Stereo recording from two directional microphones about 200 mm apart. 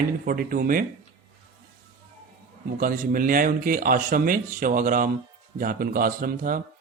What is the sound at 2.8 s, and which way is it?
A man's voice, 45° right (ahead or behind).